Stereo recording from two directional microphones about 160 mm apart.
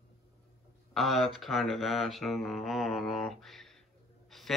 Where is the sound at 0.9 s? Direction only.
Centre (ahead or behind).